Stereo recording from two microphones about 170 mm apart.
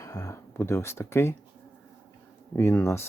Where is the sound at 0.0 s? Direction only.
20° left (ahead or behind).